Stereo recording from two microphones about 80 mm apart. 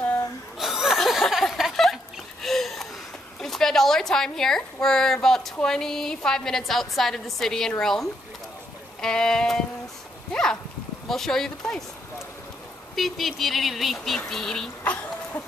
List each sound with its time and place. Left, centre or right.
0.6 s chuckle: centre
2.4 s a sound: centre
3.3 s a woman's voice: centre
9.0 s sheep: centre
11.1 s a woman's voice: centre
12.9 s a woman's voice: centre
14.3 s sheep: centre